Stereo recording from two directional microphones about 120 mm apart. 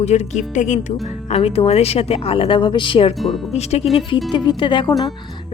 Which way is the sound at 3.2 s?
Centre (ahead or behind).